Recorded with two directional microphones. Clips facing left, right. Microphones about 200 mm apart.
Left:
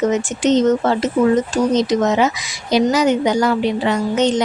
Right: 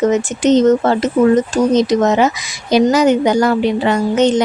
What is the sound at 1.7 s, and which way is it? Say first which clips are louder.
A woman's voice: right 4 dB; 50° right (ahead or behind).